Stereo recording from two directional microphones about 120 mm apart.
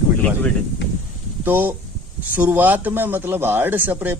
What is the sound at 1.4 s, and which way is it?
A man's voice, 15° right (ahead or behind).